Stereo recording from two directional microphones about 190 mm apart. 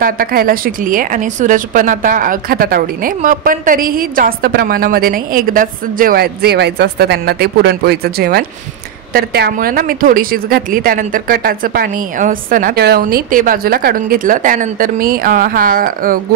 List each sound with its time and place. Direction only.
0.0 s speech: 50° right (ahead or behind)